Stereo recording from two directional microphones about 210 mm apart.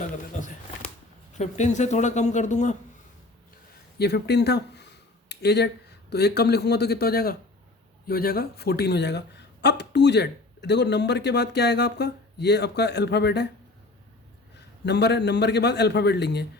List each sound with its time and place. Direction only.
0.0 s a sound: 40° left (ahead or behind)
1.3 s speech: 35° left (ahead or behind)
3.9 s speech: 50° left (ahead or behind)
14.5 s speech: 55° left (ahead or behind)